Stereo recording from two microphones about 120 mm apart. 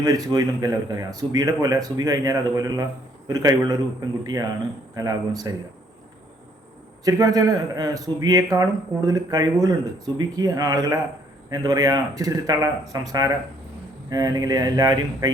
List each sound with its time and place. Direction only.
0.0 s speech: 30° right (ahead or behind)
7.0 s speech: 30° right (ahead or behind)